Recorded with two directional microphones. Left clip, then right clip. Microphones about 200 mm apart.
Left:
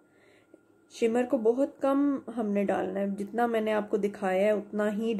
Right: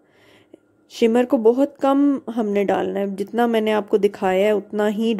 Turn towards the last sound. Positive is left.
turn(degrees=-40)  # may be behind; listen again after turning